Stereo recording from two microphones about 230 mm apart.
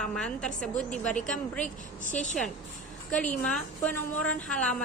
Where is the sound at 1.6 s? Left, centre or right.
Left.